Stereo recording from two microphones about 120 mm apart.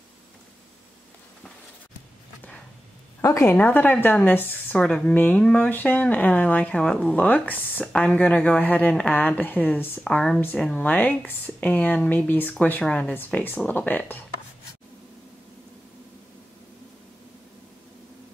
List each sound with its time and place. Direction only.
3.2 s a woman's voice: 25° left (ahead or behind)